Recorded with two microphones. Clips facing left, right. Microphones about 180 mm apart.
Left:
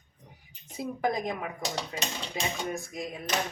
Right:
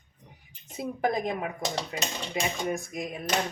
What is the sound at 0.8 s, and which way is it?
Speech, 25° right (ahead or behind).